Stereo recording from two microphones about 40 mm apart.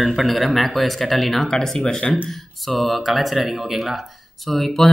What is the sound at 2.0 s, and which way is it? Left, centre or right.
Speech, left.